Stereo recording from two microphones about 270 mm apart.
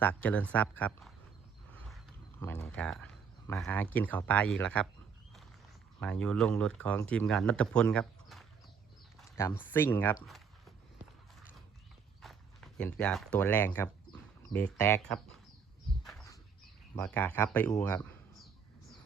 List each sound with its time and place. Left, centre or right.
0.0 s speech: centre
2.4 s speech: centre
6.0 s speech: centre
12.2 s speech: centre
16.9 s speech: centre